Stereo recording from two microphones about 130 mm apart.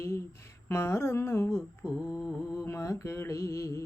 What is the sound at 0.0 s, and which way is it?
Mantra, 20° left (ahead or behind).